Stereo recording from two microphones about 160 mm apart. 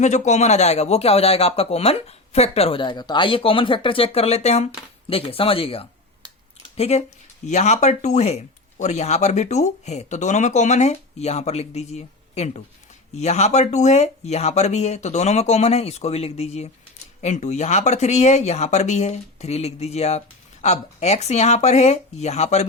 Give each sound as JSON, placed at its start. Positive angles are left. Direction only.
{"t": 0.0, "sound": "speech", "side_deg": 45}